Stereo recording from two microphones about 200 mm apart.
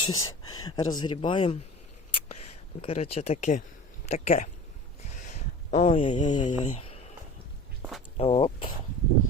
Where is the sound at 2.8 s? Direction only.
30° left (ahead or behind).